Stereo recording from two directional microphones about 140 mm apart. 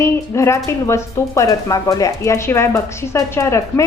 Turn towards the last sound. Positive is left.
turn(degrees=20)  # may be behind; listen again after turning